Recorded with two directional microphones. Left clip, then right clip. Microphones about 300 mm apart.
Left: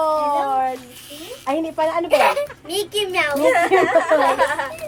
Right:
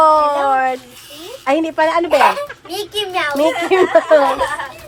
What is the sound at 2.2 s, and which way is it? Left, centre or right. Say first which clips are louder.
A child's voice: right 4 dB; centre.